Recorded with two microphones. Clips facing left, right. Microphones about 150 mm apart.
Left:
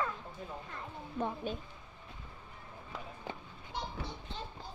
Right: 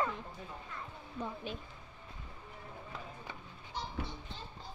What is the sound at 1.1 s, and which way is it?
Speech, 55° left (ahead or behind).